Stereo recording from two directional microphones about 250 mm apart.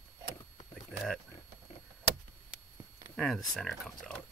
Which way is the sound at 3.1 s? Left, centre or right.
Centre.